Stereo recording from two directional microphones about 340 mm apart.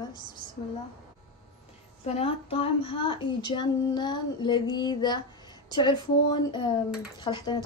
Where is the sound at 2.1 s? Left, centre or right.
Centre.